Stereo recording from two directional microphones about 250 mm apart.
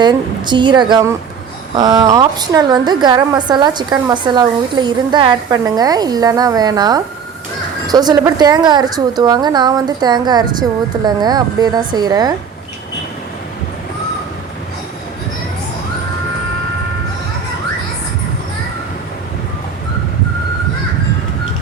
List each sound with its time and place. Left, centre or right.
0.0 s a woman's voice: centre